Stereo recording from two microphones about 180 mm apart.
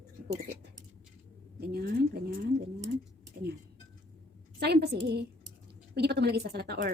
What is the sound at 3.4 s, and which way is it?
Speech, 60° right (ahead or behind).